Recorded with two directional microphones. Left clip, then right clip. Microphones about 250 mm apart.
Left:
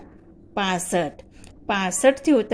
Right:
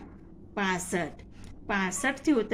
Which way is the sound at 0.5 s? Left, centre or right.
Left.